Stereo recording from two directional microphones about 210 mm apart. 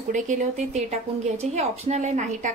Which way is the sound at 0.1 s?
35° right (ahead or behind).